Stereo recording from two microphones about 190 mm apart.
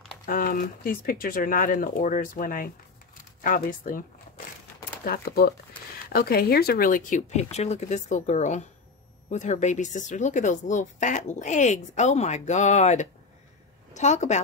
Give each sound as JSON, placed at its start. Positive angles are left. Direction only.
{"t": 0.3, "sound": "speech", "side_deg": 50}
{"t": 5.0, "sound": "speech", "side_deg": 55}